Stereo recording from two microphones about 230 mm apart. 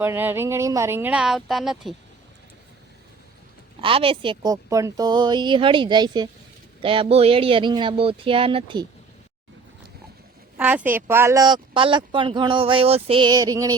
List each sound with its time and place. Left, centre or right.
0.0 s speech: centre
3.8 s speech: right
10.6 s speech: centre